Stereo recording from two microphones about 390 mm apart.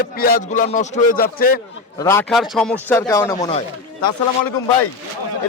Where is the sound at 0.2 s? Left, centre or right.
Left.